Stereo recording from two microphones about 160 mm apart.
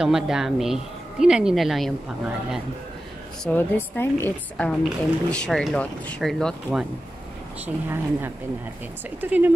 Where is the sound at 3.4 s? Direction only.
10° left (ahead or behind).